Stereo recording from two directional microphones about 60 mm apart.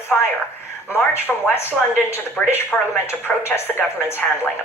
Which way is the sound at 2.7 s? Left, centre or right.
Centre.